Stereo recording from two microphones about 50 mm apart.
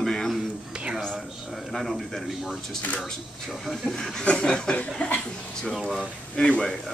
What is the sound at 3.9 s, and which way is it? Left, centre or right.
Speech, centre.